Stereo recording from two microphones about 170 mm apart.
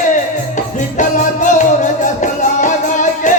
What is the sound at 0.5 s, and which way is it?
Music, 50° left (ahead or behind).